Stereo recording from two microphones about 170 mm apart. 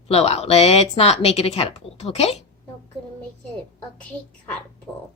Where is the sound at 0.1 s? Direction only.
35° left (ahead or behind).